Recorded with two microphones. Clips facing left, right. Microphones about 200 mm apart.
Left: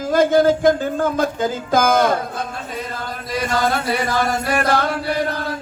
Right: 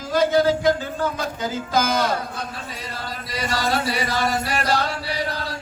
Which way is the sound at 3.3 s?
50° left (ahead or behind).